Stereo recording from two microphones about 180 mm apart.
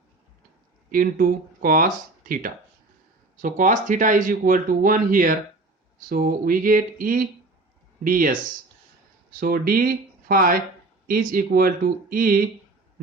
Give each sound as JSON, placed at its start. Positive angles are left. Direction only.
{"t": 0.9, "sound": "speech", "side_deg": -50}
{"t": 9.4, "sound": "speech", "side_deg": -55}